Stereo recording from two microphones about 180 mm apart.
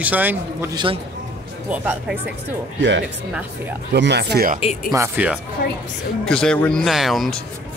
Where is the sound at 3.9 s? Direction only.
70° right (ahead or behind).